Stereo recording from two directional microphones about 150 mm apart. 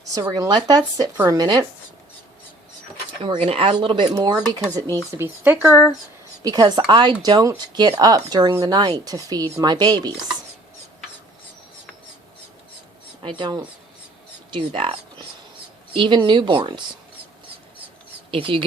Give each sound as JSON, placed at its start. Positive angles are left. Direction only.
{"t": 0.1, "sound": "speech", "side_deg": -25}
{"t": 3.2, "sound": "speech", "side_deg": -40}
{"t": 4.8, "sound": "speech", "side_deg": 15}
{"t": 5.1, "sound": "speech", "side_deg": -15}
{"t": 6.4, "sound": "speech", "side_deg": -25}
{"t": 13.2, "sound": "speech", "side_deg": -30}
{"t": 18.3, "sound": "speech", "side_deg": -35}